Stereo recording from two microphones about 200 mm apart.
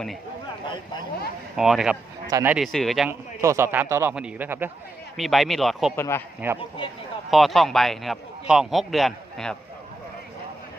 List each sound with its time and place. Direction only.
0.6 s speech: 25° left (ahead or behind)
1.5 s a man's voice: centre (ahead or behind)
2.7 s a man's voice: centre (ahead or behind)
3.1 s a man's voice: 15° right (ahead or behind)
5.1 s a man's voice: centre (ahead or behind)
6.0 s speech: 10° left (ahead or behind)
6.6 s speech: 25° left (ahead or behind)
7.3 s a man's voice: centre (ahead or behind)